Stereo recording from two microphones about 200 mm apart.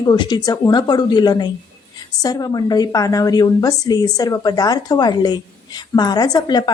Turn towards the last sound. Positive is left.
turn(degrees=20)  # may be behind; listen again after turning